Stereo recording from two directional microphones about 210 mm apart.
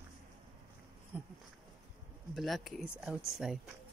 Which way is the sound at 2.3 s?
Centre (ahead or behind).